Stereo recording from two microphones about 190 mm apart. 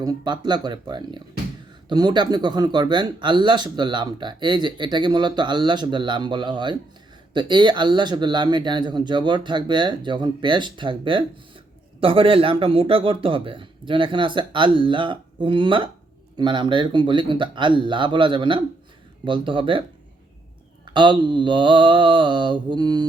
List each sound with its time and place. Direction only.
0.0 s speech: 20° right (ahead or behind)
20.8 s speech: 25° right (ahead or behind)